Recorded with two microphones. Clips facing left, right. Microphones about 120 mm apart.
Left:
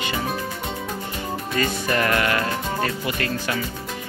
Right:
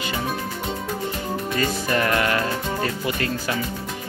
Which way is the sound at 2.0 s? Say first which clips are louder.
Even; 20° right (ahead or behind).